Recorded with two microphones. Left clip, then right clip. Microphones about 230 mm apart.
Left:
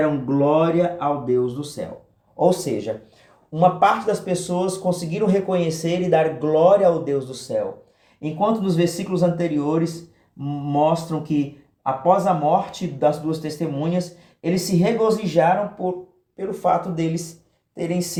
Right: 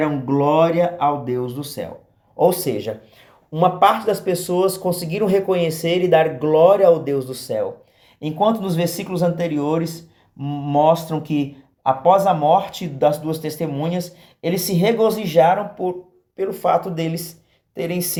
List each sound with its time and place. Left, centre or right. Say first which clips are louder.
0.0 s speech: right 1 dB; right
16.7 s speech: right 2 dB; centre
17.7 s speech: right 1 dB; right